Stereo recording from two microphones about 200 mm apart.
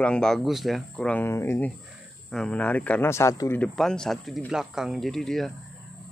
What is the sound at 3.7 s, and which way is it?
Speech, 5° left (ahead or behind).